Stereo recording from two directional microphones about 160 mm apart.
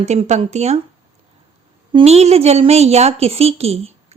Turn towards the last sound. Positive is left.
turn(degrees=-40)  # may be behind; listen again after turning